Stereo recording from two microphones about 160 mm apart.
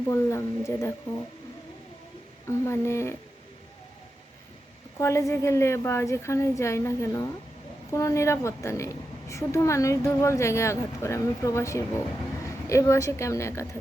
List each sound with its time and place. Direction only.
0.1 s a woman's voice: 15° left (ahead or behind)
2.5 s a woman's voice: 15° left (ahead or behind)
4.9 s a woman's voice: 20° left (ahead or behind)